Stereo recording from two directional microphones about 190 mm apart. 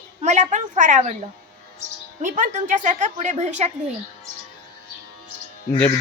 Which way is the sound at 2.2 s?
40° right (ahead or behind).